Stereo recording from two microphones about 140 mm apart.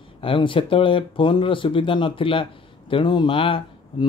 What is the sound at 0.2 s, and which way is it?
Speech, 40° left (ahead or behind).